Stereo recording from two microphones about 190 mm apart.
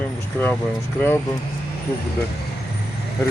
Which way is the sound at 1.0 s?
10° left (ahead or behind).